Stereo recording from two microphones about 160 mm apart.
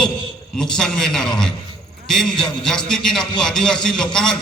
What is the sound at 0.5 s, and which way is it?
A man's voice, 5° left (ahead or behind).